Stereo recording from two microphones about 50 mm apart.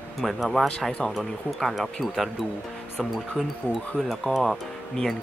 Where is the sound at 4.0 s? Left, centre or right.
Centre.